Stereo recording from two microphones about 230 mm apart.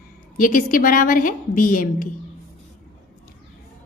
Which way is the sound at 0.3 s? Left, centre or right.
Left.